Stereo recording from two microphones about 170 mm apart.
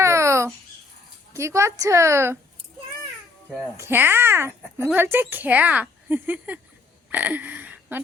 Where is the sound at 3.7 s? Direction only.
15° right (ahead or behind).